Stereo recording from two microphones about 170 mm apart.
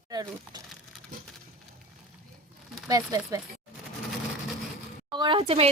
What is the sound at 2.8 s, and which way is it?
Speech, 20° right (ahead or behind).